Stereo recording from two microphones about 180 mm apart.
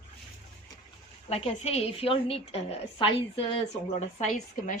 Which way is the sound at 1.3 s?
35° left (ahead or behind).